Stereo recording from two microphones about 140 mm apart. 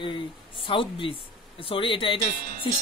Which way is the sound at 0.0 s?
35° left (ahead or behind).